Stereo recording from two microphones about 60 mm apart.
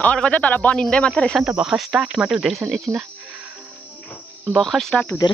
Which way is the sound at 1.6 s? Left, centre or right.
Centre.